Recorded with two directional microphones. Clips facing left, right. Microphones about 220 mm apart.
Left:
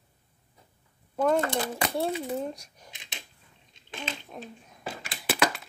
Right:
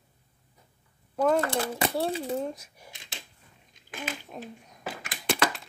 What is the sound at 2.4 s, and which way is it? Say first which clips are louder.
Speech: right 1 dB; 5° right (ahead or behind).